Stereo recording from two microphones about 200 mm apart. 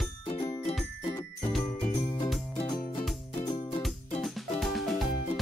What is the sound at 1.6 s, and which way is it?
Jingle bell, 25° left (ahead or behind).